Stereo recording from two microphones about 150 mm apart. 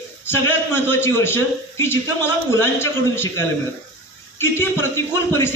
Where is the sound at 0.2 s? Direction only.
15° left (ahead or behind).